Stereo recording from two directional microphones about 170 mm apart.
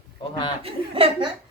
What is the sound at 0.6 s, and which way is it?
Speech, 35° right (ahead or behind).